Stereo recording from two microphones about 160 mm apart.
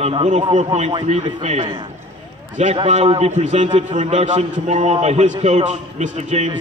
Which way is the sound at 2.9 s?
40° right (ahead or behind).